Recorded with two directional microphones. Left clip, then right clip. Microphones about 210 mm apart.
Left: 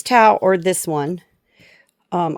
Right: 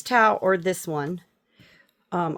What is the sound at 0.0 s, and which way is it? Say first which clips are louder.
Speech: left 7 dB; 30° left (ahead or behind).